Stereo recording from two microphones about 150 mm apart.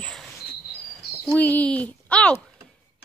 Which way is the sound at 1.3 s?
10° left (ahead or behind).